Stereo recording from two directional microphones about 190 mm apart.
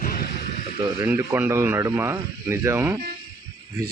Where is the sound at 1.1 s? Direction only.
10° right (ahead or behind).